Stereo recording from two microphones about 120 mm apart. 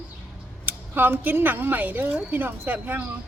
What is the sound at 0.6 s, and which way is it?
Speech, 15° right (ahead or behind).